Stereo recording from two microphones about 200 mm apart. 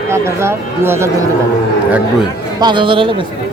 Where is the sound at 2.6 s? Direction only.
25° right (ahead or behind).